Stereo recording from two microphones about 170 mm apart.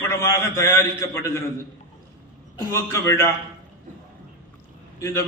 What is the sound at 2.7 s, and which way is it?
Speech, 15° left (ahead or behind).